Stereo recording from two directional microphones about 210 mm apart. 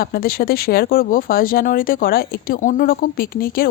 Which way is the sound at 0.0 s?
45° left (ahead or behind).